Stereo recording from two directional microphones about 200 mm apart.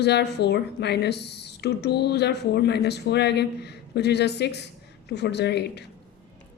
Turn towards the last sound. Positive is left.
turn(degrees=55)  # may be behind; listen again after turning